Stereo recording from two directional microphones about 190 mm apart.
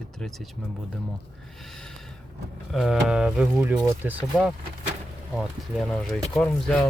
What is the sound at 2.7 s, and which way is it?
Speech, centre (ahead or behind).